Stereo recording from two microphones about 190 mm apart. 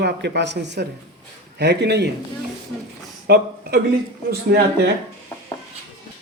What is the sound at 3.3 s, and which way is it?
Speech, 55° right (ahead or behind).